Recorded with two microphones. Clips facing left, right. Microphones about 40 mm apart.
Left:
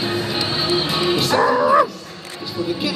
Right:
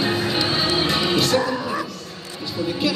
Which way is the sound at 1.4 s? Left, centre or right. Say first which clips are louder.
Left 10 dB; left.